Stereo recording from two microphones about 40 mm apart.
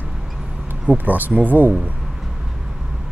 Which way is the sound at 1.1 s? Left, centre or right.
Right.